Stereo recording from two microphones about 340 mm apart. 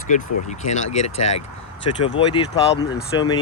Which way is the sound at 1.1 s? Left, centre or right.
Left.